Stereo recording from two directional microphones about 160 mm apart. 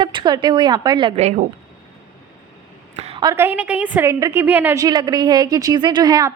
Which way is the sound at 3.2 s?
20° right (ahead or behind).